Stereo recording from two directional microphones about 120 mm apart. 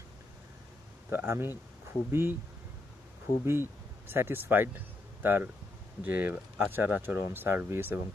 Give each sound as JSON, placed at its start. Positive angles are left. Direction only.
{"t": 1.1, "sound": "speech", "side_deg": -20}
{"t": 3.4, "sound": "speech", "side_deg": -20}